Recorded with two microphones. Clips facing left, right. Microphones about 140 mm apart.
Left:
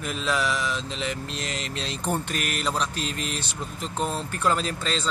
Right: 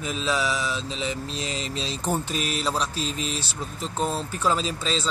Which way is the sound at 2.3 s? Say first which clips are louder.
Right 1 dB; 65° left (ahead or behind).